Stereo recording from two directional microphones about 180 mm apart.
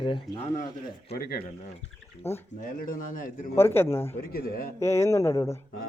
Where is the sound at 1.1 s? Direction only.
60° left (ahead or behind).